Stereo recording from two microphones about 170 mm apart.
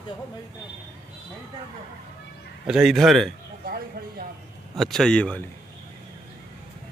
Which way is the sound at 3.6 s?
60° right (ahead or behind).